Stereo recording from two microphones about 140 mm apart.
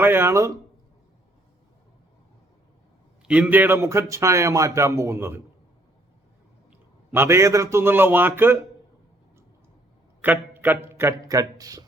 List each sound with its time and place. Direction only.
0.0 s a man's voice: 15° right (ahead or behind)
3.2 s a man's voice: 10° right (ahead or behind)
7.1 s a man's voice: 20° right (ahead or behind)
10.2 s a sound: 15° right (ahead or behind)
10.9 s speech: 20° right (ahead or behind)